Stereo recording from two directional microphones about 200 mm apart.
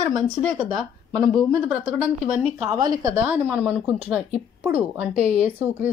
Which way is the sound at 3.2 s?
5° right (ahead or behind).